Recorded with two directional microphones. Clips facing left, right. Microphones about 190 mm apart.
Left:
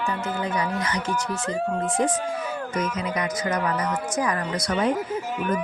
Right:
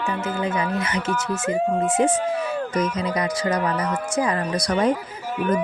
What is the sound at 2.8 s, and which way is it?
Speech, 35° right (ahead or behind).